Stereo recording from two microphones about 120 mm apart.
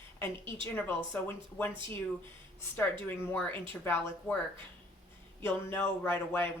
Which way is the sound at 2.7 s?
15° left (ahead or behind).